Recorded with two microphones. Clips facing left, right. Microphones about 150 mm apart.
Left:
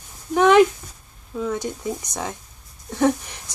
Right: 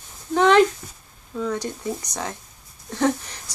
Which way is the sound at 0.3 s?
10° left (ahead or behind).